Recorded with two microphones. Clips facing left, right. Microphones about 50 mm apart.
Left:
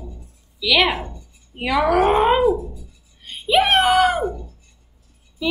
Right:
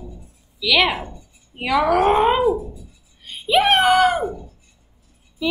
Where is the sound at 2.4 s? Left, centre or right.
Centre.